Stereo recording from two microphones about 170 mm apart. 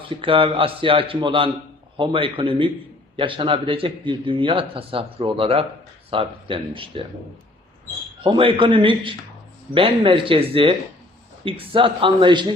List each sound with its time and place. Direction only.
0.1 s a man's voice: 30° right (ahead or behind)
8.2 s a man's voice: 30° right (ahead or behind)